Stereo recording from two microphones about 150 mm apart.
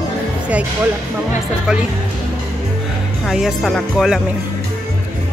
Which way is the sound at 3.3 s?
Centre (ahead or behind).